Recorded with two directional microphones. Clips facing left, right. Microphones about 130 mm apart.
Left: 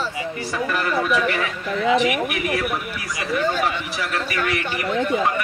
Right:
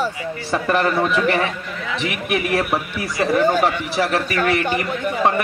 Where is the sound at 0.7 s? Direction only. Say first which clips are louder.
Right 3 dB; 35° right (ahead or behind).